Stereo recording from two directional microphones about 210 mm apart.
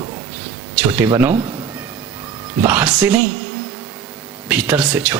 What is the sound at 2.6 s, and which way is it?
Speech, 5° right (ahead or behind).